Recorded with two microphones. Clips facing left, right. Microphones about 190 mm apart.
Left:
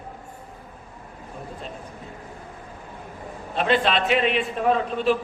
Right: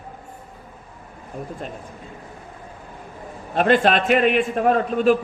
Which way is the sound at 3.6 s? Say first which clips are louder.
Right 4 dB; 50° right (ahead or behind).